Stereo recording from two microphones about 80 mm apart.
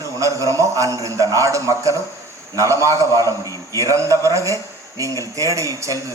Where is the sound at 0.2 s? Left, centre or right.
Right.